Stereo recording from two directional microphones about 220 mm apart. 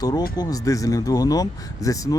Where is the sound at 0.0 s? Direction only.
20° left (ahead or behind).